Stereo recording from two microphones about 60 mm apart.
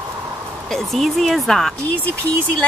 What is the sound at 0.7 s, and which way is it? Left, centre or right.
Speech, centre.